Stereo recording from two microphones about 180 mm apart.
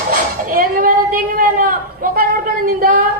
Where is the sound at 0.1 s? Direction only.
50° right (ahead or behind).